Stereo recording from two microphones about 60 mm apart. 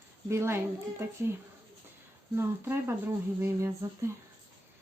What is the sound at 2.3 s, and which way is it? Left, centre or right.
Speech, right.